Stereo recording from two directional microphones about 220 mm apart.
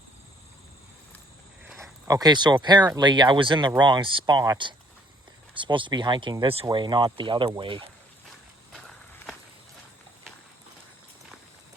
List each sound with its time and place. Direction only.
2.0 s speech: 15° right (ahead or behind)
8.7 s skateboard: centre (ahead or behind)